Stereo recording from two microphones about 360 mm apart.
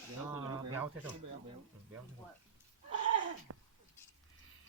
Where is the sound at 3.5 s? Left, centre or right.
Right.